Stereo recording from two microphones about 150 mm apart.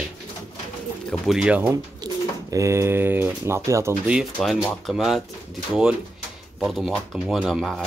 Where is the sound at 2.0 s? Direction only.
20° right (ahead or behind).